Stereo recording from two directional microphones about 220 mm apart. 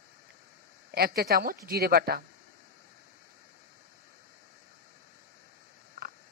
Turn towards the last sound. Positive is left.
turn(degrees=-45)  # may be behind; listen again after turning